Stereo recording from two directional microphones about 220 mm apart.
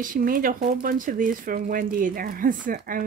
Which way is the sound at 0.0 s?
40° right (ahead or behind).